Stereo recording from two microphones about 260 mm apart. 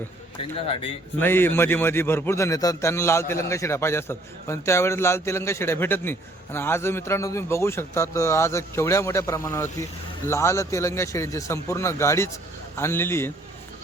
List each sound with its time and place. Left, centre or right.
0.7 s speech: left
1.2 s a man's voice: centre